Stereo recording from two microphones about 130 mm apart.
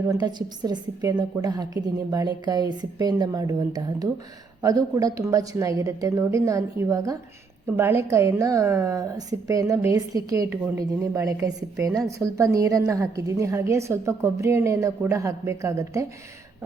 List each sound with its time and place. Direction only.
0.1 s a woman's voice: 35° right (ahead or behind)